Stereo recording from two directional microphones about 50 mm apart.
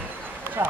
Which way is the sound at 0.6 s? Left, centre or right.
Right.